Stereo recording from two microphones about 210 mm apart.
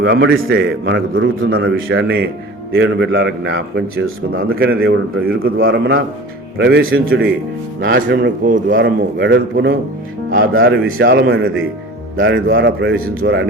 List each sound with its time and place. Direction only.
0.0 s a man's voice: 55° right (ahead or behind)
2.0 s a man's voice: 50° right (ahead or behind); by 4.4 s 70° right (ahead or behind)
4.5 s a man's voice: 45° right (ahead or behind)
7.8 s a man's voice: 65° right (ahead or behind)
10.3 s a man's voice: 70° right (ahead or behind)